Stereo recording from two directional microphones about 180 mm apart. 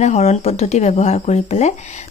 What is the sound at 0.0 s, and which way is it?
Speech, 40° left (ahead or behind).